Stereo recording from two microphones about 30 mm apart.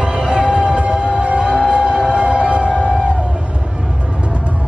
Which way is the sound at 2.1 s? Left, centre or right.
Right.